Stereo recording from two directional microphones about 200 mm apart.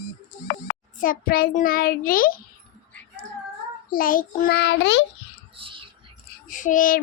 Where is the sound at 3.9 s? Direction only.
45° left (ahead or behind); by 5.0 s 60° left (ahead or behind).